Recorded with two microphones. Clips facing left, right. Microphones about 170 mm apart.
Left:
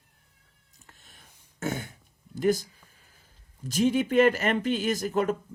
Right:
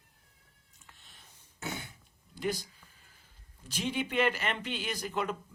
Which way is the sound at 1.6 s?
50° left (ahead or behind).